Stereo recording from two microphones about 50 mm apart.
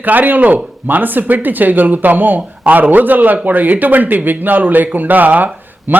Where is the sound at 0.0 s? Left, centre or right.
Right.